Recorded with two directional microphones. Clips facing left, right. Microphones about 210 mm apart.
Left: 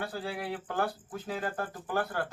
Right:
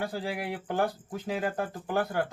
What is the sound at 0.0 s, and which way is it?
Speech, 15° right (ahead or behind).